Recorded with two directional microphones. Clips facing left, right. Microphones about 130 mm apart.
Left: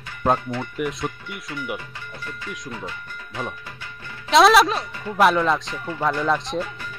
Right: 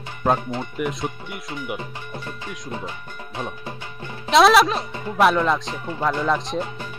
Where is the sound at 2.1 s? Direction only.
25° right (ahead or behind).